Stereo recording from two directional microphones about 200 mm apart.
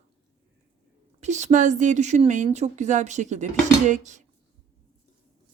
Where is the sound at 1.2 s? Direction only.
35° right (ahead or behind).